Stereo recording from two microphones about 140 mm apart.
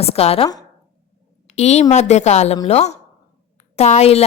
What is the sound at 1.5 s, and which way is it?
A woman's voice, 50° left (ahead or behind).